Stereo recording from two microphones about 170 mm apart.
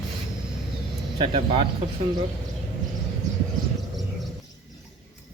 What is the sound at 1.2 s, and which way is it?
Speech, 30° right (ahead or behind).